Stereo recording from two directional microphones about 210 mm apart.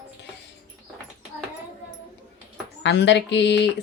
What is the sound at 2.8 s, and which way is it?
Speech, 55° left (ahead or behind).